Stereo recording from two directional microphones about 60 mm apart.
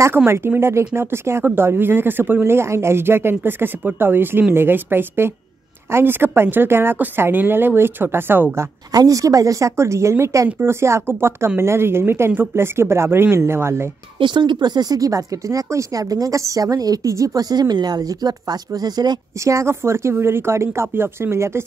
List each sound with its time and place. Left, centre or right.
0.6 s speech: right
8.9 s speech: right
10.6 s speech: right
14.9 s a woman's voice: right
18.0 s a woman's voice: right
19.7 s speech: right